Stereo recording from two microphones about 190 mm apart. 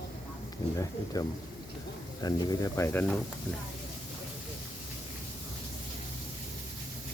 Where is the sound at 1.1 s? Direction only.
20° left (ahead or behind).